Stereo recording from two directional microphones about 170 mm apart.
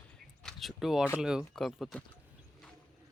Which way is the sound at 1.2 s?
5° right (ahead or behind).